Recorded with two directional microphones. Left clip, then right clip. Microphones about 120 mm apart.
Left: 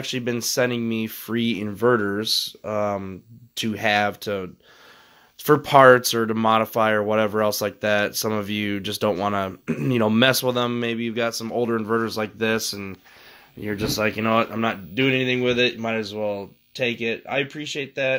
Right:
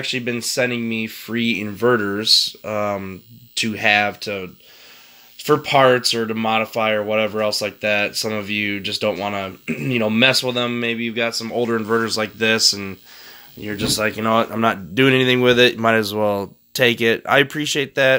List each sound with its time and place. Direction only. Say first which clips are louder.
0.0 s speech: right 3 dB; 30° left (ahead or behind)
4.1 s speech: right 1 dB; 30° left (ahead or behind)
5.5 s speech: left 1 dB; 45° left (ahead or behind); by 11.4 s 20° left (ahead or behind)
11.4 s speech: right 3 dB; 5° left (ahead or behind)
13.6 s speech: right 3 dB; 30° left (ahead or behind)
14.2 s speech: right 3 dB; 15° left (ahead or behind)
15.0 s speech: right 6 dB; 45° right (ahead or behind)